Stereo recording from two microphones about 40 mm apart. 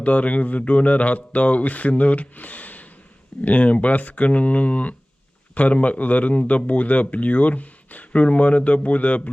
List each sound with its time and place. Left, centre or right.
0.0 s speech: left